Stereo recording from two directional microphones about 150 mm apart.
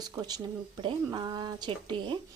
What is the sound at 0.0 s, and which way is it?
Speech, 25° right (ahead or behind).